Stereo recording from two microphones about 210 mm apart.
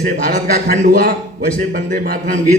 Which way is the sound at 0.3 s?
45° right (ahead or behind).